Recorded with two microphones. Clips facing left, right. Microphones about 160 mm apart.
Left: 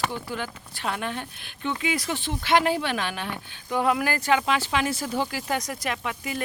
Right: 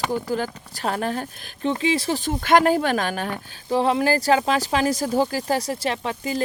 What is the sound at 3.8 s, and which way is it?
Speech, 30° right (ahead or behind).